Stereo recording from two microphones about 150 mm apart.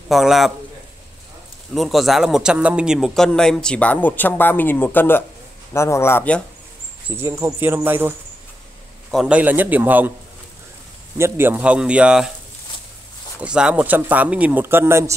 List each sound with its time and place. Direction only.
0.1 s speech: centre (ahead or behind)
1.7 s a man's voice: centre (ahead or behind)
7.1 s speech: 20° right (ahead or behind)
9.1 s speech: 5° right (ahead or behind)
11.1 s speech: 15° right (ahead or behind)
13.4 s speech: 5° right (ahead or behind)